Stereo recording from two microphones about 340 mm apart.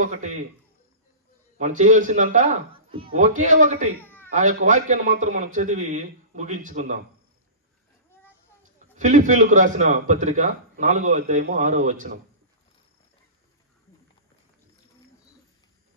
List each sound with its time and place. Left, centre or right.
0.0 s a man's voice: right
1.6 s a man's voice: right
4.0 s a sound: centre
4.3 s a man's voice: right
8.1 s a sound: centre
8.9 s a man's voice: right